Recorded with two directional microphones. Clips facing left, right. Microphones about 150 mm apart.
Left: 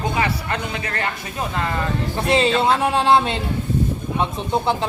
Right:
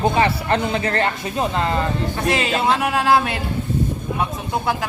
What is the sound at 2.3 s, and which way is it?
Speech, 30° left (ahead or behind).